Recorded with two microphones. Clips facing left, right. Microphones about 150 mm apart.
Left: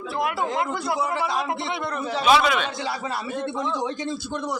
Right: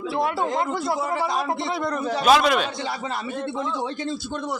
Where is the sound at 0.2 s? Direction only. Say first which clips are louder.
Right 1 dB; 25° right (ahead or behind).